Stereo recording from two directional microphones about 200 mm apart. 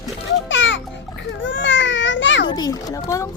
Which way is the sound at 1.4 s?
70° left (ahead or behind).